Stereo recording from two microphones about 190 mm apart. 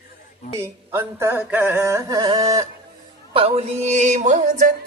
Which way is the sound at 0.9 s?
10° right (ahead or behind).